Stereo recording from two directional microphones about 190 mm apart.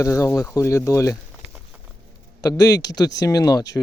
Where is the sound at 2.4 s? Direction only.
20° left (ahead or behind).